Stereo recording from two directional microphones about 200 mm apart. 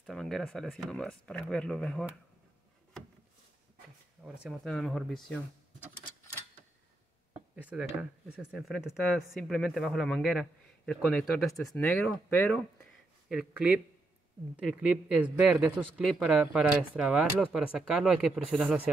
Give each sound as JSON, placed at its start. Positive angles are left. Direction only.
{"t": 0.0, "sound": "speech", "side_deg": 0}
{"t": 4.2, "sound": "speech", "side_deg": 0}
{"t": 7.5, "sound": "speech", "side_deg": -5}
{"t": 13.3, "sound": "speech", "side_deg": -5}
{"t": 15.2, "sound": "speech", "side_deg": -5}